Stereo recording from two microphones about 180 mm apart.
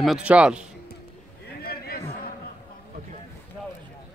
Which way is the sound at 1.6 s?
60° left (ahead or behind).